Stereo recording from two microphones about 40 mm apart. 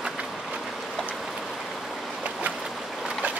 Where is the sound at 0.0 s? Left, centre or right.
Right.